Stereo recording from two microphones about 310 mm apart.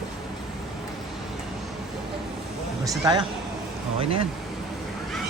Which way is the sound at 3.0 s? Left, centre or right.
Centre.